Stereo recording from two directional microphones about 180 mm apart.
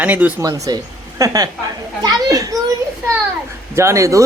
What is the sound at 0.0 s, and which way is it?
A woman's voice, 10° right (ahead or behind).